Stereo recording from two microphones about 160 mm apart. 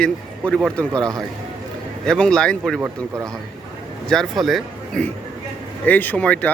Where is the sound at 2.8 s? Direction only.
20° right (ahead or behind).